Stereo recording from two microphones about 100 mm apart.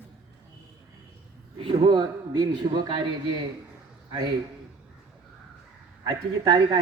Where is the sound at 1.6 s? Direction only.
60° right (ahead or behind).